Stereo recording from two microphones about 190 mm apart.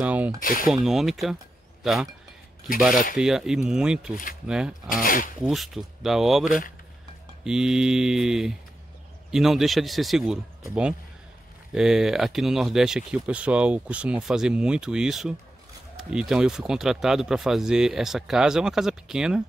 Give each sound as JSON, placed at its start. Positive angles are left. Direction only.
{"t": 0.0, "sound": "a sound", "side_deg": -5}
{"t": 0.4, "sound": "speech", "side_deg": 45}
{"t": 0.7, "sound": "speech", "side_deg": 0}
{"t": 5.0, "sound": "speech", "side_deg": 45}
{"t": 5.4, "sound": "speech", "side_deg": 0}